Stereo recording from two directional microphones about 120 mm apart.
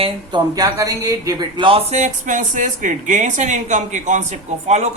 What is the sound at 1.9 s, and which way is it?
Speech, 85° right.